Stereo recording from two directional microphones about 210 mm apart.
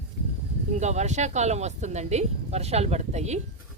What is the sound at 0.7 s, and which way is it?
Speech, 35° right (ahead or behind).